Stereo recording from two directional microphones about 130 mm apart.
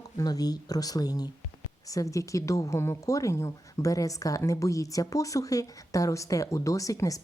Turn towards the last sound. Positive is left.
turn(degrees=25)  # may be behind; listen again after turning